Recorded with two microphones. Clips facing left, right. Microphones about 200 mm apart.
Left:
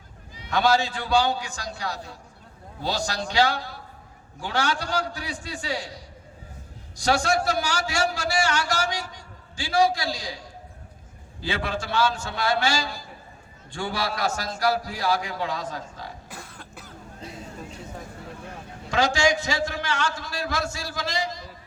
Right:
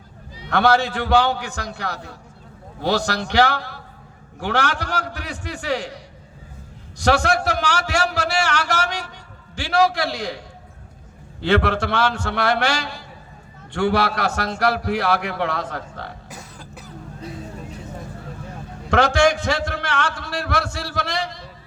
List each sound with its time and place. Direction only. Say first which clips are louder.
0.5 s a man's voice: right 4 dB; 60° right (ahead or behind)
16.3 s cough: right 3 dB; centre (ahead or behind)
18.9 s a man's voice: right 5 dB; 60° right (ahead or behind)